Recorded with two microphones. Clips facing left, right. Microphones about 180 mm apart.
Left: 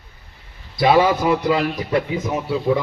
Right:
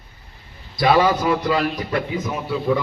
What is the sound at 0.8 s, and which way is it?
A man's voice, 15° left (ahead or behind).